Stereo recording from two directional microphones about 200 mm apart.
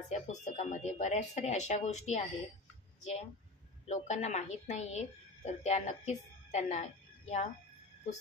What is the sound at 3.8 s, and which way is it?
A woman's voice, 35° left (ahead or behind).